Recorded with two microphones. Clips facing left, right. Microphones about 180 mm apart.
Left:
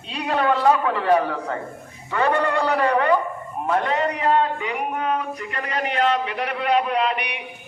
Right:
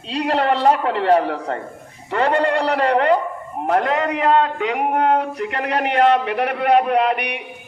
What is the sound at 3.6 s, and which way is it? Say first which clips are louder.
A man's voice: right 3 dB; 70° right (ahead or behind).